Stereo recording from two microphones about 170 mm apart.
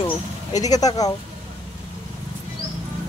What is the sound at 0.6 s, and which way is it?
Speech, 20° left (ahead or behind).